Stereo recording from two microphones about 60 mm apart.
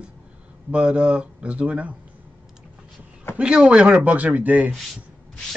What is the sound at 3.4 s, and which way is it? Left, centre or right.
Speech, centre.